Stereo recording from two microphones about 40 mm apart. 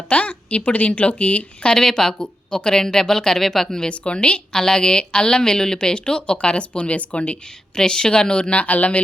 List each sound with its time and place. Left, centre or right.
0.1 s a woman's voice: left
1.7 s speech: centre
3.8 s a woman's voice: left
4.5 s a woman's voice: centre; by 7.3 s left
7.8 s a woman's voice: centre
8.6 s a woman's voice: left